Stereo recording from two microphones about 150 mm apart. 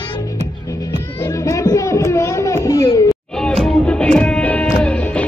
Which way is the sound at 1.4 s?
20° left (ahead or behind).